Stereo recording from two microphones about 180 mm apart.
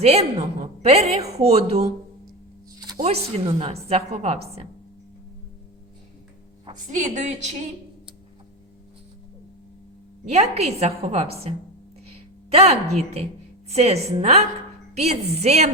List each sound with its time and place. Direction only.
0.0 s a woman's voice: 35° right (ahead or behind)
3.0 s a woman's voice: 35° right (ahead or behind)
6.7 s a woman's voice: 45° right (ahead or behind)
10.2 s a woman's voice: 35° right (ahead or behind)